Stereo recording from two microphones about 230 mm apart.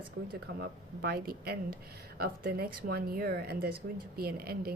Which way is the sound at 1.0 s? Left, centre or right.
Right.